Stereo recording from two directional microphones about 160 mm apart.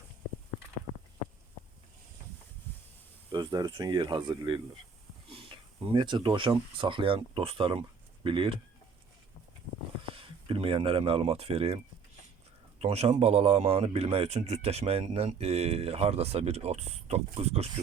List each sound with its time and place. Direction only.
3.3 s speech: 25° right (ahead or behind)
10.0 s speech: 35° right (ahead or behind)
12.8 s speech: 40° right (ahead or behind)